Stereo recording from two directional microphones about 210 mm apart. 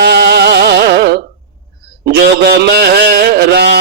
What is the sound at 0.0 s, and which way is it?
Music, 50° right (ahead or behind).